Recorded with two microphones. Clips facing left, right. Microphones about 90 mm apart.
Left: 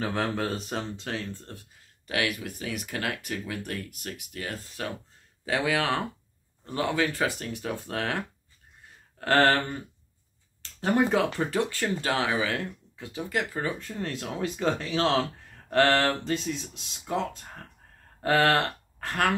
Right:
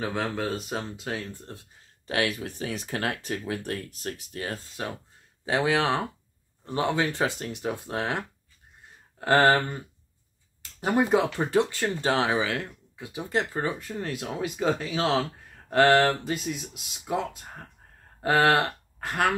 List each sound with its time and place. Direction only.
0.0 s speech: centre (ahead or behind); by 1.6 s 15° right (ahead or behind)
2.0 s speech: 35° right (ahead or behind)
4.8 s speech: 25° right (ahead or behind)
9.2 s speech: 20° right (ahead or behind)
10.6 s speech: 15° right (ahead or behind)
13.3 s speech: 30° right (ahead or behind)
13.7 s speech: 15° right (ahead or behind)
15.7 s speech: 15° right (ahead or behind)